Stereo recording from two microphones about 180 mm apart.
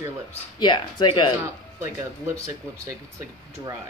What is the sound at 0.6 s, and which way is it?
Speech, 25° left (ahead or behind).